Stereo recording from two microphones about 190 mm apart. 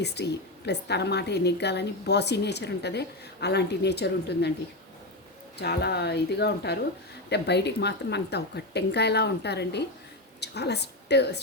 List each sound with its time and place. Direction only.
0.0 s a woman's voice: 60° left (ahead or behind)
5.5 s a woman's voice: 60° left (ahead or behind)